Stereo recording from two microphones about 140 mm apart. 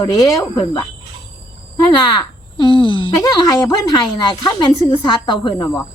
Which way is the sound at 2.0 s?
30° left (ahead or behind).